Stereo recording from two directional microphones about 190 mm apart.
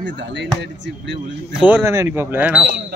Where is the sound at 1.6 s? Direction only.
10° right (ahead or behind).